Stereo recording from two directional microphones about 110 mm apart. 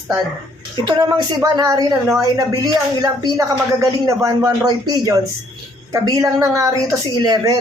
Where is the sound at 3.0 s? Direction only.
30° right (ahead or behind).